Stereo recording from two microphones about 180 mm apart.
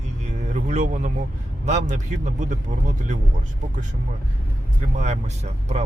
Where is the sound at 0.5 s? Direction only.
45° right (ahead or behind).